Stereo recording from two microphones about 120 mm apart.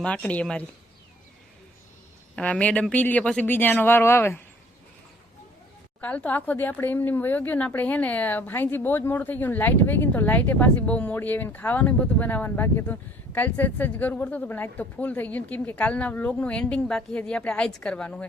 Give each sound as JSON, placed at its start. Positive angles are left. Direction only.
{"t": 0.0, "sound": "speech", "side_deg": 10}
{"t": 2.3, "sound": "speech", "side_deg": 10}
{"t": 6.0, "sound": "speech", "side_deg": 10}